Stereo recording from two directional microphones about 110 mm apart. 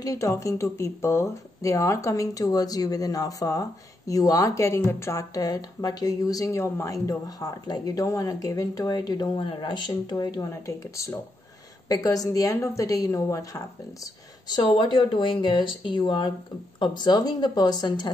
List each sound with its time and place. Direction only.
0.0 s speech: 30° left (ahead or behind)
10.5 s speech: 25° left (ahead or behind)
14.5 s speech: 50° left (ahead or behind)